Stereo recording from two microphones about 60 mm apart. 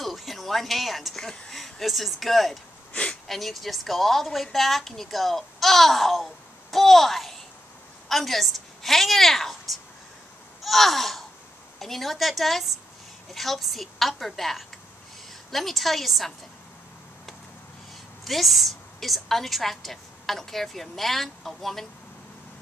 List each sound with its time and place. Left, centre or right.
0.0 s a sound: centre
1.5 s a woman's voice: centre
2.9 s a sound: centre
3.3 s a woman's voice: centre
10.6 s babbling: centre
11.8 s a woman's voice: centre
18.2 s a woman's voice: centre